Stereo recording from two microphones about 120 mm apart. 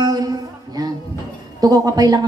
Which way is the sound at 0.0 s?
35° right (ahead or behind).